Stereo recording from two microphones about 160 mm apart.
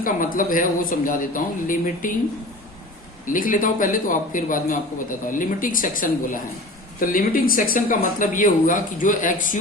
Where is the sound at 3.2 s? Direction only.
55° left (ahead or behind).